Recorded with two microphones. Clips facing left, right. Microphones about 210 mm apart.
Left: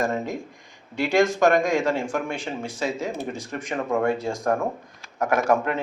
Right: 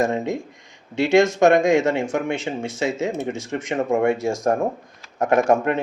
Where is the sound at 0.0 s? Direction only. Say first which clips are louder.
Right 4 dB; 25° right (ahead or behind).